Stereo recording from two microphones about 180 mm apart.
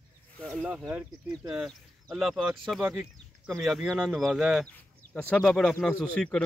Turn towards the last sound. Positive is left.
turn(degrees=5)  # may be behind; listen again after turning